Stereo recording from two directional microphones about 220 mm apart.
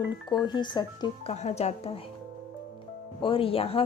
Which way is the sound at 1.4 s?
30° left (ahead or behind).